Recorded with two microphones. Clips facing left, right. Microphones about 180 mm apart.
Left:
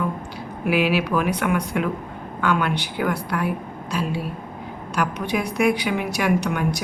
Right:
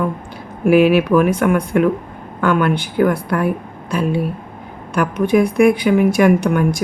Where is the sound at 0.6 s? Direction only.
45° right (ahead or behind).